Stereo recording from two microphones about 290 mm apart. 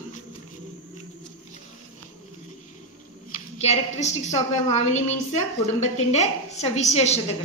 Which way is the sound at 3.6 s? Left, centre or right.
Left.